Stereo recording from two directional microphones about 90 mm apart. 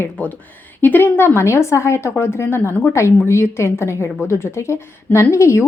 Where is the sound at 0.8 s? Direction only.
20° left (ahead or behind).